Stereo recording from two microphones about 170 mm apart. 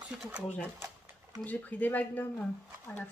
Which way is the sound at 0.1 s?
5° right (ahead or behind).